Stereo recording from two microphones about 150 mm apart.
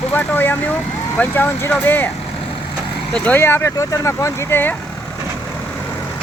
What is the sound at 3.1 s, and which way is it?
Speech, 10° left (ahead or behind).